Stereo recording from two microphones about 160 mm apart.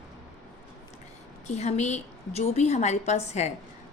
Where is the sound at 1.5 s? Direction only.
45° left (ahead or behind).